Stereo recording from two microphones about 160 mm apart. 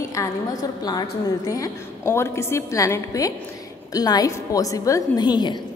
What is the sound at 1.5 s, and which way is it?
A woman's voice, 20° left (ahead or behind).